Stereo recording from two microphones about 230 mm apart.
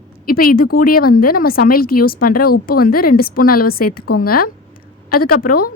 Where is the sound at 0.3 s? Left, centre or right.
Left.